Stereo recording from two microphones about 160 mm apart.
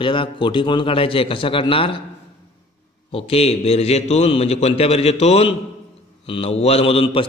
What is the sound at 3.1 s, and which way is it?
A man's voice, 35° left (ahead or behind).